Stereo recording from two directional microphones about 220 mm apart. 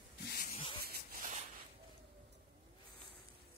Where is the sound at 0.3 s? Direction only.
40° left (ahead or behind).